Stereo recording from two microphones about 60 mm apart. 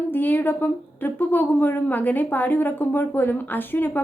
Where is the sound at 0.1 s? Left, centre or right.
Left.